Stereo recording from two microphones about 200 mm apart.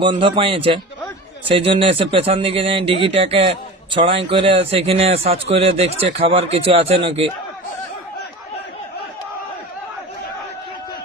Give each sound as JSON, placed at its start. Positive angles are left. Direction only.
{"t": 0.0, "sound": "a man's voice", "side_deg": -25}